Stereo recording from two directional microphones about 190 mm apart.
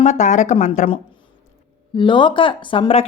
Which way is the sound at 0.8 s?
30° left (ahead or behind).